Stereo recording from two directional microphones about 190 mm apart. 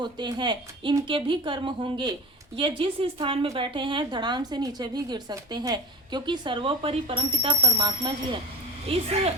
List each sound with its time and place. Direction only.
0.0 s a woman's voice: 25° right (ahead or behind)